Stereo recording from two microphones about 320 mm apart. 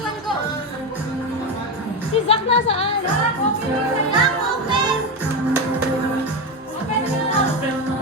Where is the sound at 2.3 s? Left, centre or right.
Centre.